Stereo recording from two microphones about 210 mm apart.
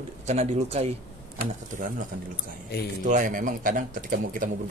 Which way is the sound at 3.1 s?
40° right (ahead or behind).